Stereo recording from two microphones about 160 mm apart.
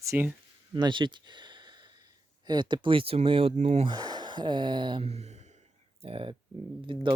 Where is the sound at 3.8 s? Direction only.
25° right (ahead or behind).